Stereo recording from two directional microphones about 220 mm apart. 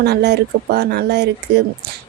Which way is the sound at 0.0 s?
50° right (ahead or behind).